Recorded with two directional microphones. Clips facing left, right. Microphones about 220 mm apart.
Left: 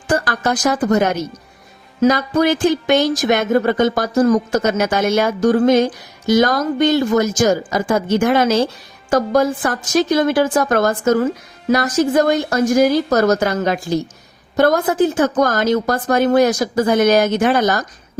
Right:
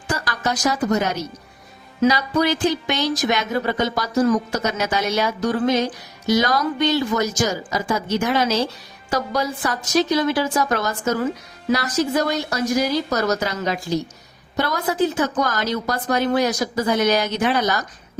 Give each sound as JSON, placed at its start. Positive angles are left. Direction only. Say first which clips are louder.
{"t": 0.1, "sound": "speech", "louder": "left 6 dB", "side_deg": 50}